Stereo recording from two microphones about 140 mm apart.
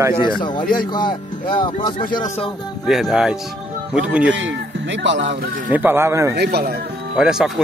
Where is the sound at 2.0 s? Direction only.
90° left.